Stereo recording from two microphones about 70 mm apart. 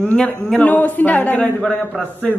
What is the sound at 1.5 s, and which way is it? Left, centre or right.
Speech, centre.